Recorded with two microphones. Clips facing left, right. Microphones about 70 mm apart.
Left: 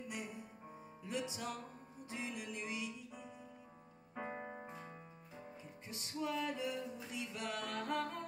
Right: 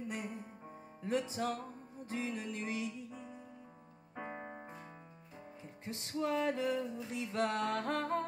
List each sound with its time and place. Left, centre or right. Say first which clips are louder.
0.1 s music: right 4 dB; right
4.1 s piano: even; centre
5.9 s music: right 5 dB; right
7.8 s music: right 5 dB; right